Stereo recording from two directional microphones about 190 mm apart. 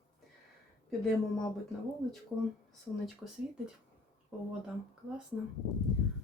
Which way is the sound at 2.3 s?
Centre (ahead or behind).